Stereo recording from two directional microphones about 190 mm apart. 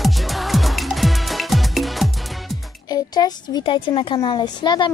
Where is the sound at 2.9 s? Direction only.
20° left (ahead or behind).